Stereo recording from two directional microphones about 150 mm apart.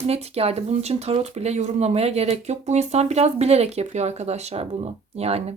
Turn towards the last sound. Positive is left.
turn(degrees=-45)  # may be behind; listen again after turning